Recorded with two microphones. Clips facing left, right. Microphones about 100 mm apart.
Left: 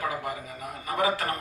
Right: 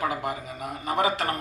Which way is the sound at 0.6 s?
20° right (ahead or behind).